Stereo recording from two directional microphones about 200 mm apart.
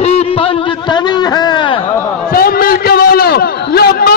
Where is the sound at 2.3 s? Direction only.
45° left (ahead or behind).